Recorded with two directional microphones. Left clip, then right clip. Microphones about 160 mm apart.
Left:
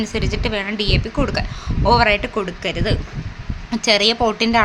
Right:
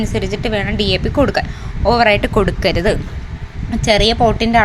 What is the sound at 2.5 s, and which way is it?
Speech, 40° right (ahead or behind).